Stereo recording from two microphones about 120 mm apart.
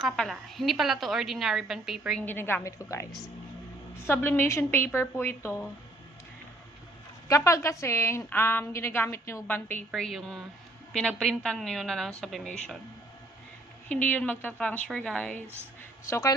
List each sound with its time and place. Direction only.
0.0 s a woman's voice: centre (ahead or behind)
2.2 s a woman's voice: 15° left (ahead or behind)
7.3 s a woman's voice: 25° left (ahead or behind)
9.9 s a woman's voice: centre (ahead or behind)
13.8 s a woman's voice: 10° left (ahead or behind)
16.0 s a woman's voice: 25° left (ahead or behind)